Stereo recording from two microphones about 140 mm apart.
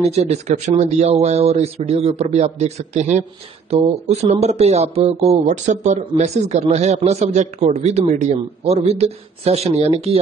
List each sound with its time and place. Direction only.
0.1 s speech: 50° right (ahead or behind)